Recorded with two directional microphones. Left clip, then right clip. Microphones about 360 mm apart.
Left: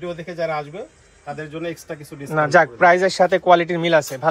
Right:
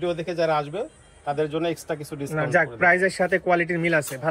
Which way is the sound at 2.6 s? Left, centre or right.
Centre.